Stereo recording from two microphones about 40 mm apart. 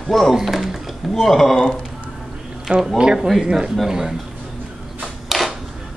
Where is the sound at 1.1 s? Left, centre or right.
Centre.